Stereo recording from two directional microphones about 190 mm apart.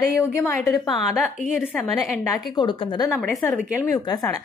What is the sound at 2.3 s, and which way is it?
Speech, 20° left (ahead or behind).